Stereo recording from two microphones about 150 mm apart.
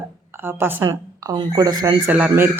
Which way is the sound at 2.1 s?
10° right (ahead or behind).